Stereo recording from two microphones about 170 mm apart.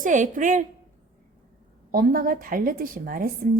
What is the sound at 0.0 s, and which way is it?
Speech, 50° right (ahead or behind).